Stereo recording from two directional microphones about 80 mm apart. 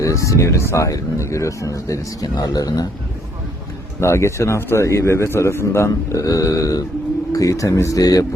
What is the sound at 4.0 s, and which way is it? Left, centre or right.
Speech, left.